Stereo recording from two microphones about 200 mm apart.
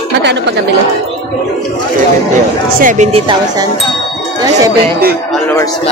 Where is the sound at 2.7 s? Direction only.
40° right (ahead or behind).